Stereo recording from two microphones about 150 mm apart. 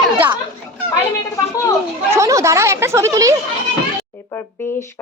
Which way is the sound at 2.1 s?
20° right (ahead or behind).